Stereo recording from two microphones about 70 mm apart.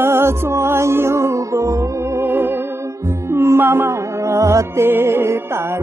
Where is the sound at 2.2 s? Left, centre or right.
Right.